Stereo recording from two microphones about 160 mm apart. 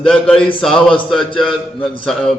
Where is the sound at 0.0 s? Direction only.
5° left (ahead or behind).